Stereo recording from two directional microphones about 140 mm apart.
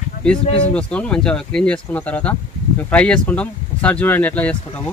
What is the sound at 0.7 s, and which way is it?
Speech, 10° left (ahead or behind).